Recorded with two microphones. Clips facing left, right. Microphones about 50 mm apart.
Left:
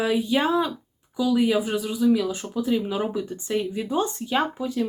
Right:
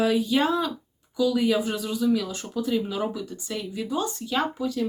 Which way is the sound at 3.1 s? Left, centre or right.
Left.